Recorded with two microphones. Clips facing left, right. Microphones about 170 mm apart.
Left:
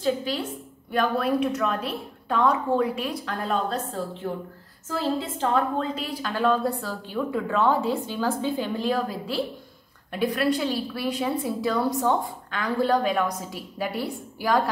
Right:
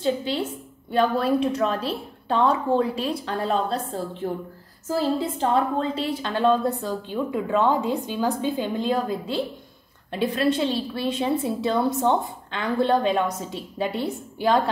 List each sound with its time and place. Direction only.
0.0 s a woman's voice: 25° right (ahead or behind)
4.8 s a woman's voice: 35° right (ahead or behind)